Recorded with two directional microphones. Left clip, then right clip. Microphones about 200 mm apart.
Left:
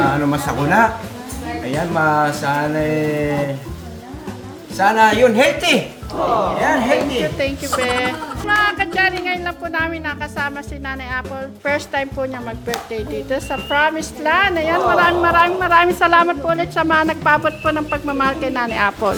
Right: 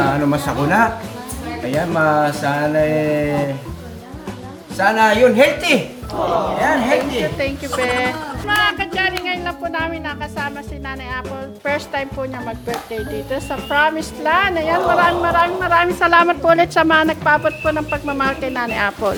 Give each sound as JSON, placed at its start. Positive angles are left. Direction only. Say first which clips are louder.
{"t": 0.0, "sound": "speech", "louder": "even", "side_deg": 5}
{"t": 1.9, "sound": "speech", "louder": "even", "side_deg": 5}
{"t": 4.8, "sound": "speech", "louder": "even", "side_deg": 10}
{"t": 16.0, "sound": "speech", "louder": "even", "side_deg": 0}
{"t": 16.3, "sound": "speech", "louder": "right 5 dB", "side_deg": -20}
{"t": 17.1, "sound": "speech", "louder": "even", "side_deg": 5}